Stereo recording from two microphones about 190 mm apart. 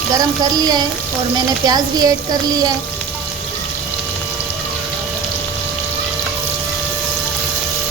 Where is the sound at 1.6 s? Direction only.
20° right (ahead or behind).